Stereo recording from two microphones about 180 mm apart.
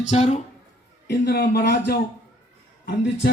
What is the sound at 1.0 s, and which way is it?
Speech, 60° left (ahead or behind).